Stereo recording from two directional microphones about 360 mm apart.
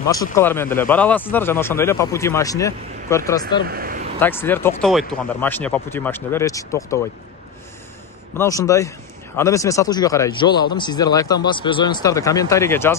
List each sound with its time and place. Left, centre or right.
0.1 s speech: centre
3.6 s a man's voice: right
4.2 s speech: centre
8.4 s speech: centre